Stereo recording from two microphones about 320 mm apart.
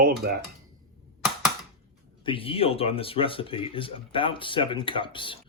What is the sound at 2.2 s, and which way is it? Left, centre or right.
Speech, centre.